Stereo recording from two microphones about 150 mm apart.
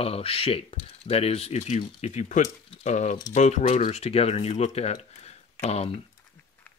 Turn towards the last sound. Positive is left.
turn(degrees=45)  # may be behind; listen again after turning